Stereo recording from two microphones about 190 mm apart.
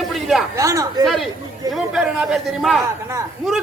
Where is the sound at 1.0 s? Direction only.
Centre (ahead or behind).